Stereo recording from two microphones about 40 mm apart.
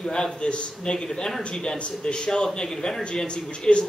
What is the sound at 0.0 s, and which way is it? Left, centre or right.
Speech, centre.